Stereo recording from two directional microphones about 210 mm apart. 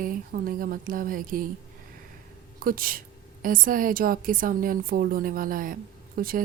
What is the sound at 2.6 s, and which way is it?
A woman's voice, 45° right (ahead or behind).